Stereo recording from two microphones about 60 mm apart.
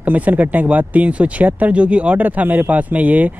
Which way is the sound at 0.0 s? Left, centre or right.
Right.